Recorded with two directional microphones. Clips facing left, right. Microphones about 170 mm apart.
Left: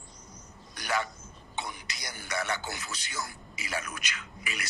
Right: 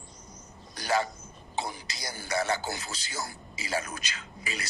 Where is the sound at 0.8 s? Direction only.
30° right (ahead or behind).